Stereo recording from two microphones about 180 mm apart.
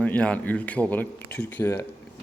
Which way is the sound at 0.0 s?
5° left (ahead or behind).